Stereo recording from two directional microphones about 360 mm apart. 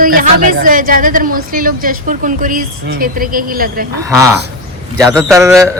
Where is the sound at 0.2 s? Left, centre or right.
Right.